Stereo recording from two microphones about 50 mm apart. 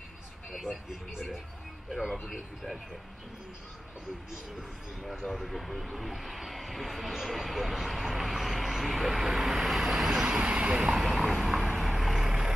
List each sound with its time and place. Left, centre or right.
0.5 s speech: centre
5.0 s speech: centre
10.4 s speech: right
11.0 s vehicle: centre